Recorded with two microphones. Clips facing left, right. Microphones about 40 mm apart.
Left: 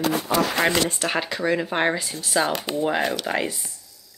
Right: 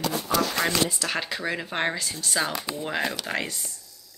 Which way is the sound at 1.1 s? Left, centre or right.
Centre.